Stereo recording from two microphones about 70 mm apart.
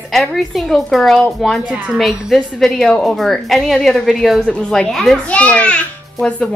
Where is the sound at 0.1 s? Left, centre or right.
Centre.